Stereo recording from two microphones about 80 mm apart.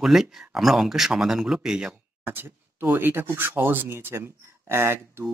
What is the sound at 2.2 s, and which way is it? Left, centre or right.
Speech, right.